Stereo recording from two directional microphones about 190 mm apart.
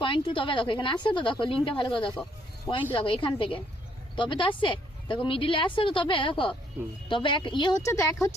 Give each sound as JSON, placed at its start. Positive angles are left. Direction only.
{"t": 0.0, "sound": "speech", "side_deg": 25}